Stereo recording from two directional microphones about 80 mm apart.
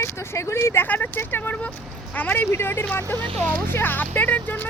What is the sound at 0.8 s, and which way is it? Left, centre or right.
Speech, left.